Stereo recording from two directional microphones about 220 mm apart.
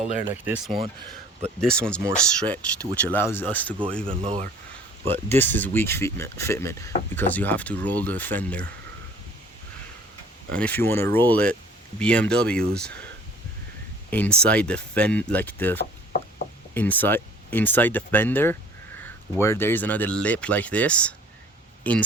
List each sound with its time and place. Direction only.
0.0 s speech: 5° right (ahead or behind)
4.1 s speech: 25° right (ahead or behind)
5.4 s speech: 10° left (ahead or behind)
10.5 s speech: 5° left (ahead or behind)
14.1 s speech: 5° left (ahead or behind)